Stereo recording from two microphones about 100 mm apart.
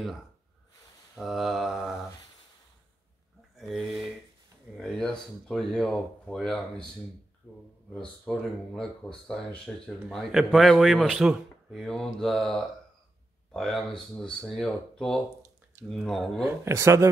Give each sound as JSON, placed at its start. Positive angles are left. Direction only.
{"t": 1.1, "sound": "speech", "side_deg": 0}
{"t": 3.5, "sound": "speech", "side_deg": 0}
{"t": 7.5, "sound": "speech", "side_deg": 20}
{"t": 7.9, "sound": "speech", "side_deg": 5}
{"t": 16.4, "sound": "speech", "side_deg": -30}